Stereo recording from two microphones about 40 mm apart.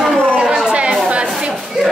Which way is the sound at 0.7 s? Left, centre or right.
Right.